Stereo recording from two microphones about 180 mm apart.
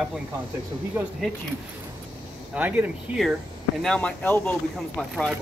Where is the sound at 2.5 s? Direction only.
10° right (ahead or behind).